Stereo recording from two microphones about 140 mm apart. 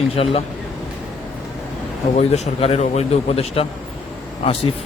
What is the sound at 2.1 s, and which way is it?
Speech, 55° left (ahead or behind).